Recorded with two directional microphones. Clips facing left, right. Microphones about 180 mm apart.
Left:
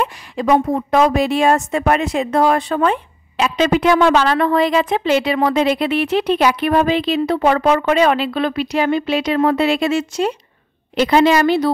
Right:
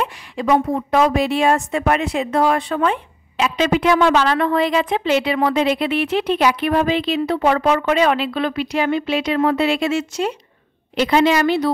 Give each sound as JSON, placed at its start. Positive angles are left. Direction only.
{"t": 0.0, "sound": "a woman's voice", "side_deg": 45}